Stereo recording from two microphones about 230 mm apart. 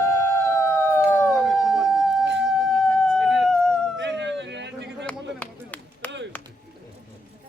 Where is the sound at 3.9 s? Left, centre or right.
Right.